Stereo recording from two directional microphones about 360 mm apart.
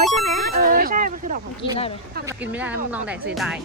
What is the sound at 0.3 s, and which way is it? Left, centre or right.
Vehicle, right.